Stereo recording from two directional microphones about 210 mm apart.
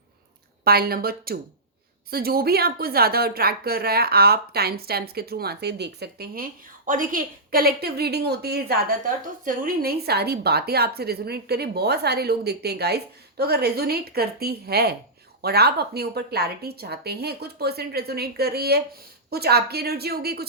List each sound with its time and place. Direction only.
0.6 s a woman's voice: 45° right (ahead or behind)